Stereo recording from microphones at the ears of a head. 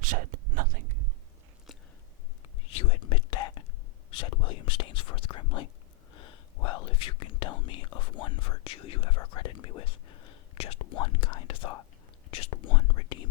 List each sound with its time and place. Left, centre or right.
0.0 s whispering: right
2.6 s whispering: left